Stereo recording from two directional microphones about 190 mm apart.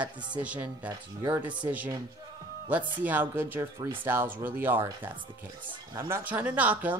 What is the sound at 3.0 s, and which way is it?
Speech, 10° right (ahead or behind).